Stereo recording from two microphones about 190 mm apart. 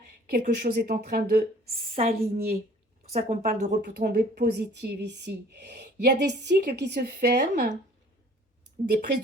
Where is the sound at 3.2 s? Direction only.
40° right (ahead or behind).